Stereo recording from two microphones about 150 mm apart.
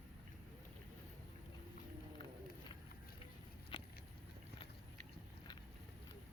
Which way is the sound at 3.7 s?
35° left (ahead or behind).